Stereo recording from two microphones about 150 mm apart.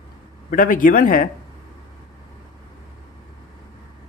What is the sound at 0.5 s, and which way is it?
Speech, 65° left (ahead or behind).